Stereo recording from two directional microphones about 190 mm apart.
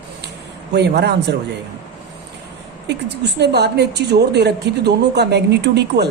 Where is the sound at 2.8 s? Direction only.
60° right (ahead or behind).